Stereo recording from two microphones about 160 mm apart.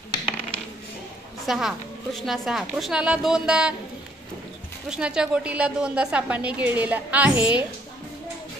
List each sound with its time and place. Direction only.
1.4 s a woman's voice: centre (ahead or behind)
4.8 s a woman's voice: 5° right (ahead or behind)